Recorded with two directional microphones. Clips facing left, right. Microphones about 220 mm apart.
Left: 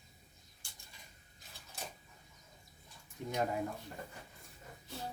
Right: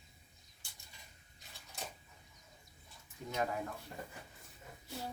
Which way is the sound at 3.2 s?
20° left (ahead or behind).